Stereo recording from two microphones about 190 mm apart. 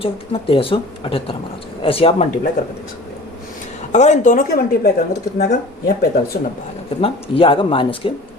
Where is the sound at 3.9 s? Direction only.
40° left (ahead or behind).